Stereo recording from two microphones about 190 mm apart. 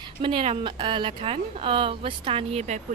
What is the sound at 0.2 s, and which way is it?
A woman's voice, 30° right (ahead or behind).